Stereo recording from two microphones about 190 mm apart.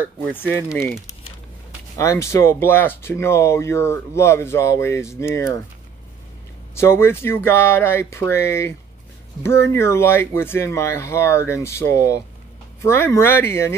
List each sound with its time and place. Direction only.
0.5 s speech: 10° left (ahead or behind)
2.0 s speech: 15° left (ahead or behind)
6.7 s speech: 15° left (ahead or behind)